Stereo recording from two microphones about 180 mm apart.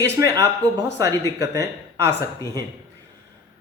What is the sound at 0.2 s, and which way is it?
A man's voice, 20° right (ahead or behind).